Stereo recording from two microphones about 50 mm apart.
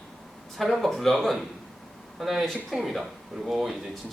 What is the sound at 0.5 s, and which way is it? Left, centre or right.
A man's voice, centre.